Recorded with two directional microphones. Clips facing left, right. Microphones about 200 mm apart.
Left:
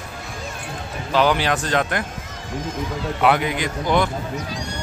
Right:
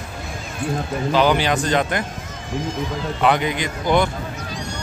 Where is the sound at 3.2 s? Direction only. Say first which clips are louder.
Even; 5° left (ahead or behind).